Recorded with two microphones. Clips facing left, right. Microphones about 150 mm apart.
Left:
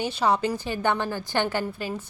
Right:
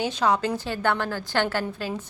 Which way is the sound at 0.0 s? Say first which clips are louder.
Even; 10° left (ahead or behind).